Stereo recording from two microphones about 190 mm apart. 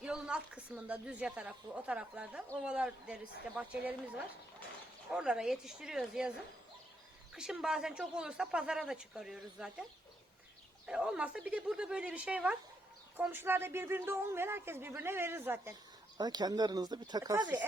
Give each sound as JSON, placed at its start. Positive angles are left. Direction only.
{"t": 0.0, "sound": "speech", "side_deg": -5}
{"t": 5.1, "sound": "speech", "side_deg": -5}
{"t": 7.3, "sound": "speech", "side_deg": -5}
{"t": 10.8, "sound": "speech", "side_deg": -5}